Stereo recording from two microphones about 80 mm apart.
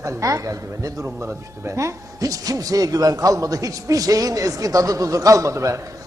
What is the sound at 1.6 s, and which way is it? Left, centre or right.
A man's voice, right.